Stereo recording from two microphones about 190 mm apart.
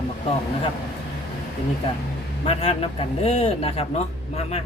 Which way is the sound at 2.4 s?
30° left (ahead or behind).